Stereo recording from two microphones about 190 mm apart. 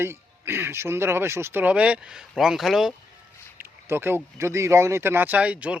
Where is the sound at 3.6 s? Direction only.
10° right (ahead or behind).